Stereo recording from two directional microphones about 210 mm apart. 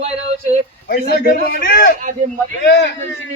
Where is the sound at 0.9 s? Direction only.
45° left (ahead or behind).